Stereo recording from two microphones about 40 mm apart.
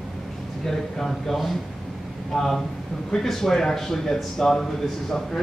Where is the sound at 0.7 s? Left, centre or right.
Centre.